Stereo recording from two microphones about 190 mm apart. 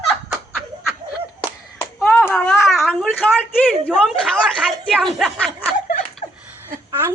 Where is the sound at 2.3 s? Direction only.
5° left (ahead or behind).